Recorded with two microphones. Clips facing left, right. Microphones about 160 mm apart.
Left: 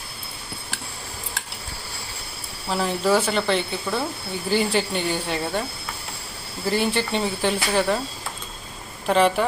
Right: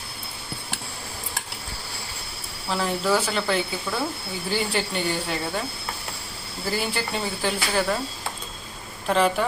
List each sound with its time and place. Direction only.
2.6 s speech: centre (ahead or behind)
6.7 s speech: 5° right (ahead or behind)
9.0 s speech: centre (ahead or behind)